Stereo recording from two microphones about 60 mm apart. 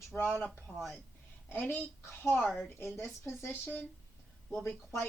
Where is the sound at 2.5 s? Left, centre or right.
Centre.